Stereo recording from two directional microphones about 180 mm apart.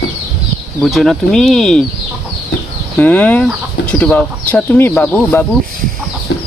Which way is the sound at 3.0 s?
10° left (ahead or behind).